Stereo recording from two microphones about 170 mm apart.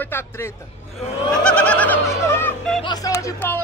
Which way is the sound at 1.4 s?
5° left (ahead or behind).